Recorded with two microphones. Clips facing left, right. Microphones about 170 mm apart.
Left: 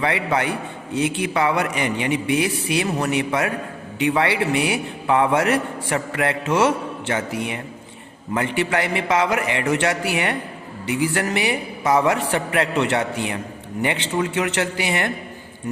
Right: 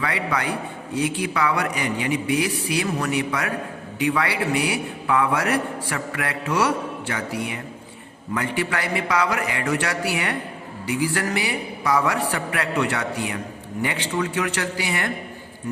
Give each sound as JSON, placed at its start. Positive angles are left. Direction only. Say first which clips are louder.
{"t": 0.0, "sound": "a man's voice", "louder": "left 4 dB", "side_deg": 25}